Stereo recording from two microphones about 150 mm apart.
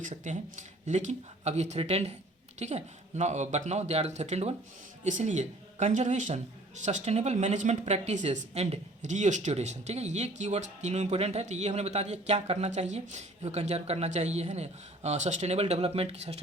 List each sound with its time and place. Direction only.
0.0 s speech: 55° right (ahead or behind)